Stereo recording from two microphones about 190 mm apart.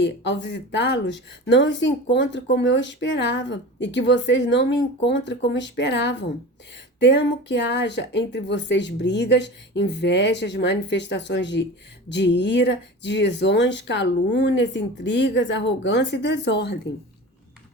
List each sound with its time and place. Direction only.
0.0 s speech: 65° left (ahead or behind)